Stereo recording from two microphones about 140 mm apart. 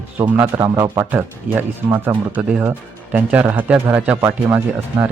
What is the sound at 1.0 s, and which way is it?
Speech, 15° right (ahead or behind).